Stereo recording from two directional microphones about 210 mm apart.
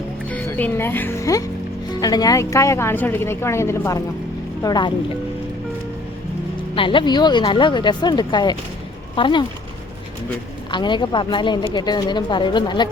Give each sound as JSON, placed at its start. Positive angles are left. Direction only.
{"t": 0.3, "sound": "a woman's voice", "side_deg": 10}
{"t": 6.7, "sound": "a woman's voice", "side_deg": 25}
{"t": 10.7, "sound": "a woman's voice", "side_deg": 20}